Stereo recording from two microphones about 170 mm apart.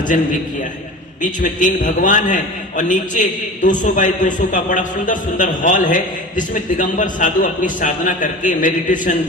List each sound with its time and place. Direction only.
1.2 s a man's voice: 50° left (ahead or behind)